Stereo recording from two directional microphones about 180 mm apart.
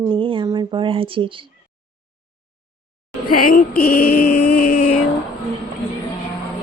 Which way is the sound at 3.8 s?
55° left (ahead or behind).